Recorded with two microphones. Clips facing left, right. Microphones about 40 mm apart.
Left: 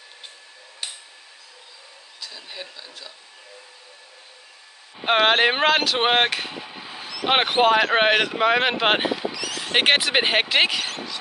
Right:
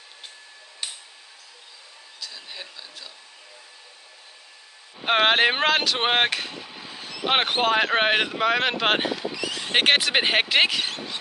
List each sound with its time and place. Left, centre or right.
2.1 s speech: centre
5.0 s speech: centre
9.3 s speech: centre
9.8 s speech: centre